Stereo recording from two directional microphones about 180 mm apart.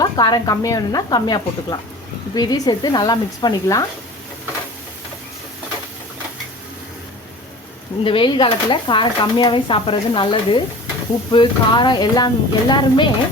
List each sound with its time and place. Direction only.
0.0 s speech: 20° left (ahead or behind)
8.0 s speech: 30° left (ahead or behind)